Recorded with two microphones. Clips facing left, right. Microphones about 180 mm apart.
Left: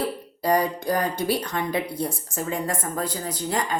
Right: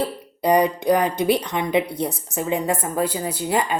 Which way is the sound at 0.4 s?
20° right (ahead or behind).